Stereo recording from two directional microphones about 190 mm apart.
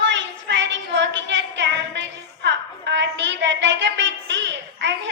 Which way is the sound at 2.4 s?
65° right (ahead or behind).